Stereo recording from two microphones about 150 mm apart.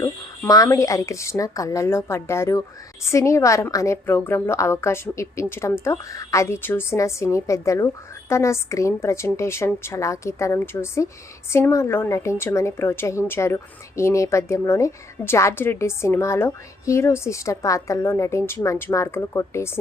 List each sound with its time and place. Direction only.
0.0 s a woman's voice: 20° left (ahead or behind)